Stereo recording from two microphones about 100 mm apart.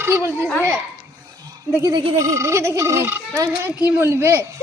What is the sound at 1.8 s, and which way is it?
Speech, 40° right (ahead or behind).